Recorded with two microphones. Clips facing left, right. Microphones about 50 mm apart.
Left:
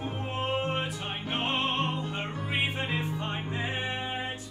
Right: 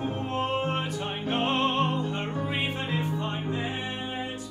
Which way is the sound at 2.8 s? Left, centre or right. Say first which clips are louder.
Right 2 dB; left.